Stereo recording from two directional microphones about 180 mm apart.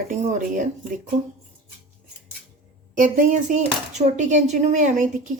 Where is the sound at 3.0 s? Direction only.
45° right (ahead or behind).